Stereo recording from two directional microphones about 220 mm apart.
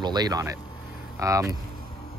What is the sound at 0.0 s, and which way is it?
Speech, 20° right (ahead or behind).